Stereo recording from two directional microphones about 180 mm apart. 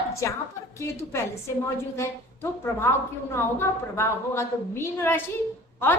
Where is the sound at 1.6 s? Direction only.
15° left (ahead or behind).